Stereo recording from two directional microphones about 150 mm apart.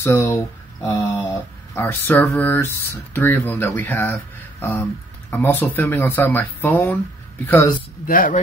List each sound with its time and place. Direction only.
0.0 s speech: 20° left (ahead or behind)
0.8 s a sound: 20° left (ahead or behind)
1.8 s speech: 15° left (ahead or behind)
8.1 s speech: 70° left (ahead or behind)